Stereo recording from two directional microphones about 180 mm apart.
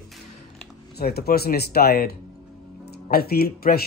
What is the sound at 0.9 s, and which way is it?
Speech, 60° left (ahead or behind).